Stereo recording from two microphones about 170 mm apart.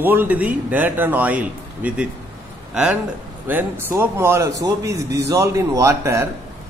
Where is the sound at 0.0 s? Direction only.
10° right (ahead or behind).